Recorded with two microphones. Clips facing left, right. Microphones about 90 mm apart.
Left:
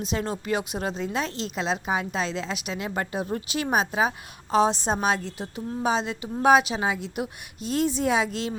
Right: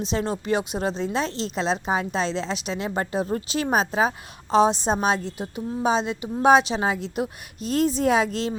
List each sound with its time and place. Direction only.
0.0 s a woman's voice: 25° right (ahead or behind)
4.5 s a woman's voice: 20° right (ahead or behind); by 8.5 s 35° right (ahead or behind)